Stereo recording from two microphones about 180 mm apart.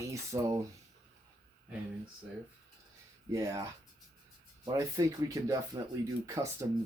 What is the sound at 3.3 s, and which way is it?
Speech, 20° right (ahead or behind).